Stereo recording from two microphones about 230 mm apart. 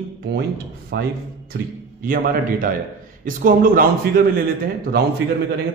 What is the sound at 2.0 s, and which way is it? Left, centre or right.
A man's voice, right.